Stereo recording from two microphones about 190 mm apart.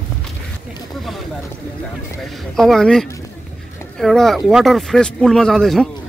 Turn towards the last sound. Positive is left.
turn(degrees=0)  # may be behind; listen again after turning